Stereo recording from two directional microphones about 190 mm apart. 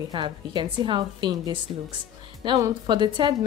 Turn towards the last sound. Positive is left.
turn(degrees=-25)  # may be behind; listen again after turning